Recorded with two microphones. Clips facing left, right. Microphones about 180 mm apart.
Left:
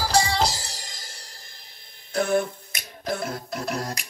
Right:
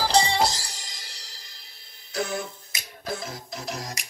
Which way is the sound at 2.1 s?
55° left (ahead or behind).